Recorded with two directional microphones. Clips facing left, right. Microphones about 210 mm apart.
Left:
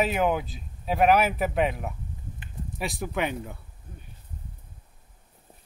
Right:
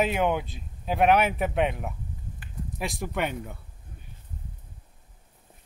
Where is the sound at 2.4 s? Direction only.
20° left (ahead or behind).